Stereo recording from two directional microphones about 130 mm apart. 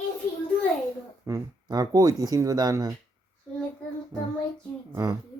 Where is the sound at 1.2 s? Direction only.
30° right (ahead or behind).